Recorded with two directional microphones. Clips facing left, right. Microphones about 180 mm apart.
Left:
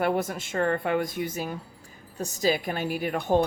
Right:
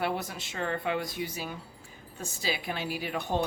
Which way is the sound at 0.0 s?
50° left (ahead or behind).